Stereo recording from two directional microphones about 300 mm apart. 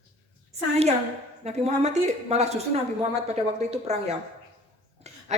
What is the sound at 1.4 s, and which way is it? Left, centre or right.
A woman's voice, right.